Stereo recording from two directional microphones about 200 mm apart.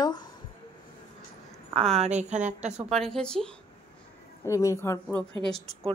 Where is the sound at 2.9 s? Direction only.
Centre (ahead or behind).